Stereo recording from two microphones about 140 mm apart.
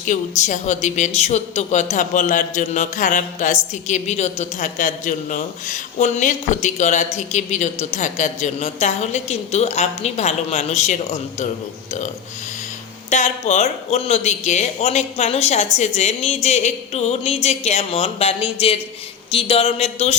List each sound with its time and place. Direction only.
0.0 s a woman's voice: 60° left (ahead or behind)
13.1 s a woman's voice: 60° left (ahead or behind)